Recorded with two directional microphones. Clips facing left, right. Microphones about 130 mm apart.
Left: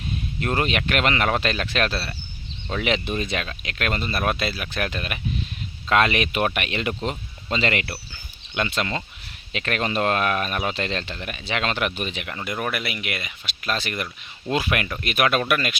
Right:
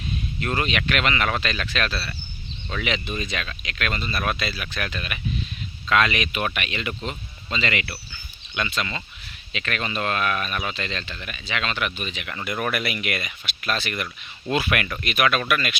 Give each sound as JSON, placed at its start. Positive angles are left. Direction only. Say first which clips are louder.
{"t": 0.3, "sound": "speech", "louder": "left 2 dB", "side_deg": 40}
{"t": 3.2, "sound": "speech", "louder": "left 3 dB", "side_deg": 55}
{"t": 12.3, "sound": "speech", "louder": "right 3 dB", "side_deg": 25}
{"t": 15.0, "sound": "speech", "louder": "left 2 dB", "side_deg": 45}